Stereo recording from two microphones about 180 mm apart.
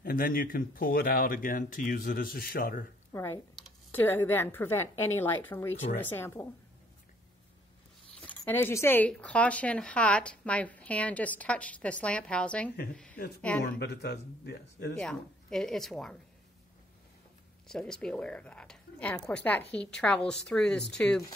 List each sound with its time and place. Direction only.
0.0 s speech: 50° left (ahead or behind)
3.1 s computer keyboard: 15° left (ahead or behind)
3.5 s speech: 10° left (ahead or behind)
8.2 s a woman's voice: 10° left (ahead or behind)
13.7 s speech: 65° left (ahead or behind)
15.0 s a woman's voice: 5° left (ahead or behind)
17.6 s a woman's voice: 5° left (ahead or behind)